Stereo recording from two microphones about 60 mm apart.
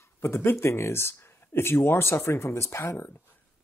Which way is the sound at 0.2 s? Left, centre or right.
Left.